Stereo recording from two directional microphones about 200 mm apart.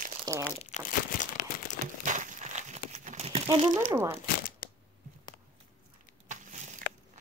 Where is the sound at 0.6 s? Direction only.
40° left (ahead or behind).